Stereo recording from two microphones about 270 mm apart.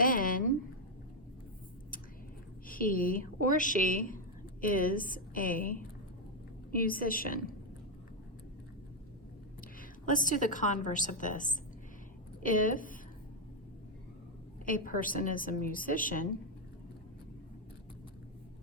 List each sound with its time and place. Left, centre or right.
0.0 s a sound: left
2.6 s a woman's voice: left
10.1 s a woman's voice: left
14.6 s a woman's voice: left